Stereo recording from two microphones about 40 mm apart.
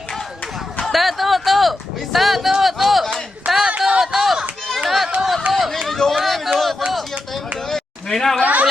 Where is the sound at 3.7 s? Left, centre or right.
Right.